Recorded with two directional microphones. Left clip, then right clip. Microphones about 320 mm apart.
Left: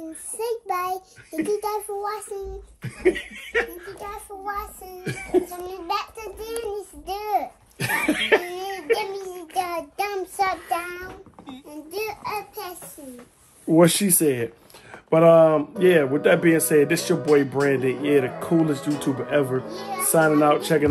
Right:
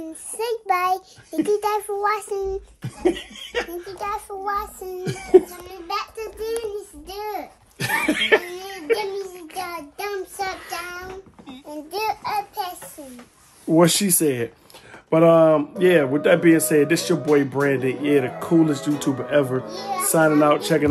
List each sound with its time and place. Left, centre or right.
0.4 s a man's voice: centre
5.1 s a man's voice: centre
7.1 s babbling: left
7.8 s a man's voice: centre
8.6 s a sound: centre
9.3 s child singing: centre
11.9 s babbling: right
13.7 s a man's voice: centre